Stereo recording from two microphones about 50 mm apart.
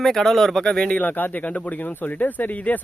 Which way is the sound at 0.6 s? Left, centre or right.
Centre.